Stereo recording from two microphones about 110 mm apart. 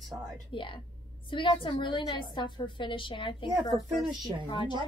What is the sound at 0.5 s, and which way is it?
A woman's voice, 50° left (ahead or behind).